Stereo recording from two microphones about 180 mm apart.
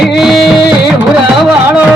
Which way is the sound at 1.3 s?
Centre (ahead or behind).